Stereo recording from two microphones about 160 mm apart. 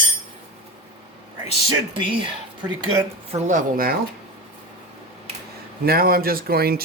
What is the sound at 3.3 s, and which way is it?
Speech, 50° right (ahead or behind).